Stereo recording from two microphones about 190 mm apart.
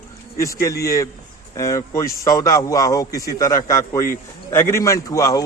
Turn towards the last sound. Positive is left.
turn(degrees=20)  # may be behind; listen again after turning